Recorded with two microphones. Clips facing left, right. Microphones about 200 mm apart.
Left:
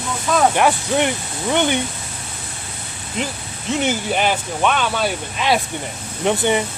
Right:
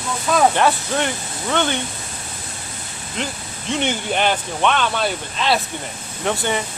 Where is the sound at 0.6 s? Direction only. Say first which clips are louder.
Left 2 dB; 15° left (ahead or behind).